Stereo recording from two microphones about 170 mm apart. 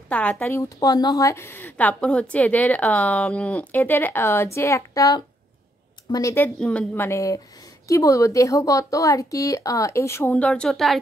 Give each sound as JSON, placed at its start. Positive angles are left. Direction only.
{"t": 0.1, "sound": "a woman's voice", "side_deg": 10}